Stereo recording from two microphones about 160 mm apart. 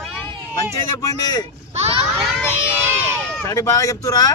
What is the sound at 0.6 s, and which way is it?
Speech, 20° left (ahead or behind).